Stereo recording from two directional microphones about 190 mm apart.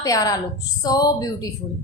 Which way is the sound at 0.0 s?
20° left (ahead or behind).